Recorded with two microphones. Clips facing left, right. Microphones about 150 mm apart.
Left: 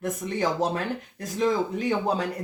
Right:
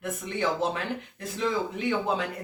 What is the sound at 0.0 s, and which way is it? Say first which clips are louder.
Speech: left 3 dB; 40° left (ahead or behind).